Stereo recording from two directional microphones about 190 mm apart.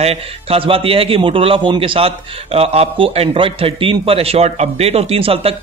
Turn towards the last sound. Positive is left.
turn(degrees=-30)  # may be behind; listen again after turning